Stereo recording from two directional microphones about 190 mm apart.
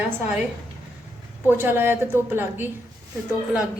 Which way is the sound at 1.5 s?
10° right (ahead or behind).